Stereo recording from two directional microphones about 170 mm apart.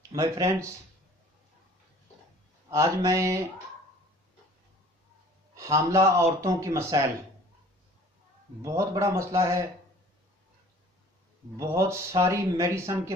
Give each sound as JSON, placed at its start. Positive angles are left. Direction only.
{"t": 0.1, "sound": "speech", "side_deg": -20}
{"t": 2.7, "sound": "speech", "side_deg": -20}
{"t": 5.6, "sound": "speech", "side_deg": -20}
{"t": 8.6, "sound": "speech", "side_deg": -20}
{"t": 11.5, "sound": "speech", "side_deg": -20}